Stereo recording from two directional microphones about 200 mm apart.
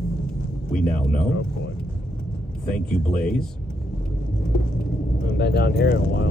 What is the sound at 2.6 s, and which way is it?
Speech, 5° left (ahead or behind).